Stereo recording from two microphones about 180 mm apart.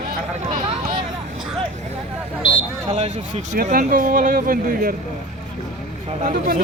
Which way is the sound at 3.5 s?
50° right (ahead or behind).